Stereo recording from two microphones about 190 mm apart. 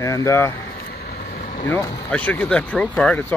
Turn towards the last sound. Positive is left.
turn(degrees=5)  # may be behind; listen again after turning